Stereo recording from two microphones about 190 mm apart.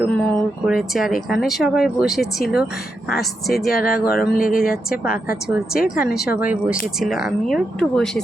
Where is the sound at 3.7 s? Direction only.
50° left (ahead or behind).